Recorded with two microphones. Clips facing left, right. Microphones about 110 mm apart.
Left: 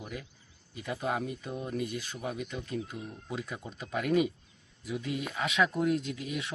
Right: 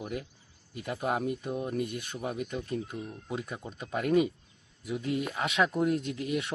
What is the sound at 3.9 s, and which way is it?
Speech, 35° right (ahead or behind).